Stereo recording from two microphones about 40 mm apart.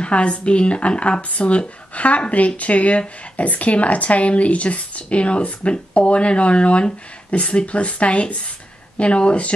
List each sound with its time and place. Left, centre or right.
0.0 s speech: left